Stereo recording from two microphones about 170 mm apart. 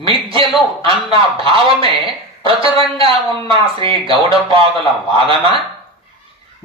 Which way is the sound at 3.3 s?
30° right (ahead or behind).